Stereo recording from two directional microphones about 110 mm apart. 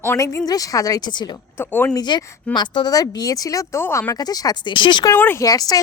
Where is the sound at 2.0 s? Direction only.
45° left (ahead or behind).